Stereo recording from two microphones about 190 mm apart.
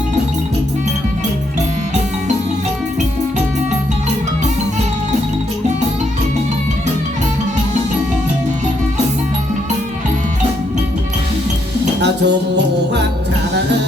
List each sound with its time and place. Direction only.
11.9 s music: 65° right (ahead or behind)